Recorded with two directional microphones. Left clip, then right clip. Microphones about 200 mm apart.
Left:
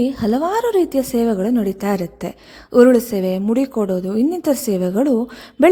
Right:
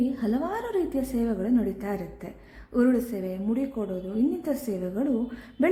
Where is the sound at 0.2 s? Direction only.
35° left (ahead or behind).